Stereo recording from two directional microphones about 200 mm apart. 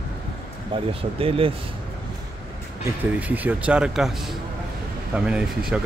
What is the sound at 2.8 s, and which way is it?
Speech, 10° right (ahead or behind).